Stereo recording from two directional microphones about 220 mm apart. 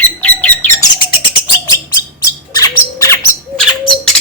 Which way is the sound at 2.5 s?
15° left (ahead or behind).